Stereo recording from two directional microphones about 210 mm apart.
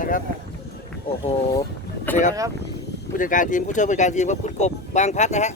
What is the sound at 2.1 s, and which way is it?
Speech, 10° left (ahead or behind).